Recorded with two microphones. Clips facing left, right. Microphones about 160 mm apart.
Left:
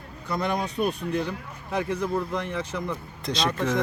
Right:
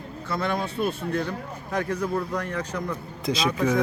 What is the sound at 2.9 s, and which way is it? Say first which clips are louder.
Speech: right 3 dB; centre (ahead or behind).